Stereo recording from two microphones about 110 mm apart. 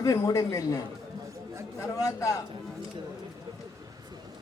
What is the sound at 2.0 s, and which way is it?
Speech, 30° left (ahead or behind).